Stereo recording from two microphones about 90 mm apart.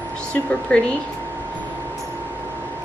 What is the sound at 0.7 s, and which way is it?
Speech, 15° left (ahead or behind).